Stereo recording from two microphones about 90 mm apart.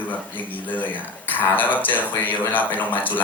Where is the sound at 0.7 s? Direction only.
20° left (ahead or behind).